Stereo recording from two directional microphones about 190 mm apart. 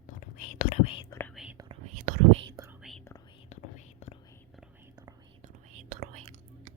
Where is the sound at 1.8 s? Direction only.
40° right (ahead or behind).